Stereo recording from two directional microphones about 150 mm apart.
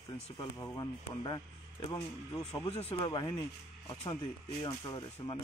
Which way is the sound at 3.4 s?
15° left (ahead or behind).